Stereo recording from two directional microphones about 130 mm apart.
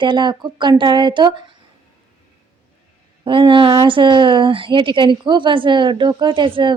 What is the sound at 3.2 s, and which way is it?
A woman's voice, 40° right (ahead or behind).